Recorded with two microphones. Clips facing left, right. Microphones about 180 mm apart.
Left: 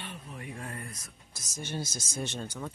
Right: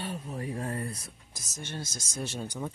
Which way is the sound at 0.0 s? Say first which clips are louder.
Right 7 dB; 40° right (ahead or behind).